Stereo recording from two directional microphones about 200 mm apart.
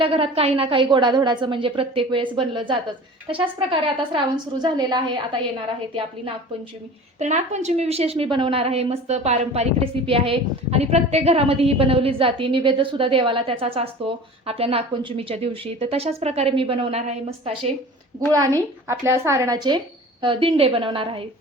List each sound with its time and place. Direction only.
0.0 s a woman's voice: 25° right (ahead or behind)
7.2 s a woman's voice: 35° right (ahead or behind)
18.9 s a woman's voice: 15° right (ahead or behind)